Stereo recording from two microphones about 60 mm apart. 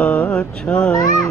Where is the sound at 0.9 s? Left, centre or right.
Left.